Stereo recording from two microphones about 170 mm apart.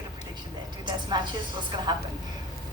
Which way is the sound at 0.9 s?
25° right (ahead or behind).